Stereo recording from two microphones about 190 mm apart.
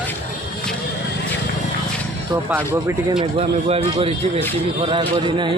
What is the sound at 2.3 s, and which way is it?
Speech, 15° right (ahead or behind).